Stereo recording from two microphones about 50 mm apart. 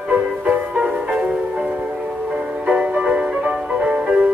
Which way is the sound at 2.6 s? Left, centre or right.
Centre.